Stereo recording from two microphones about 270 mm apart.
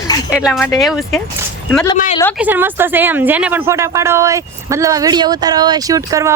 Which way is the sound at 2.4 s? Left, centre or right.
Centre.